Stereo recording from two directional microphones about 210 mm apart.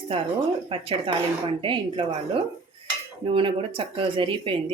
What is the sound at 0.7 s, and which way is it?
Speech, 25° right (ahead or behind).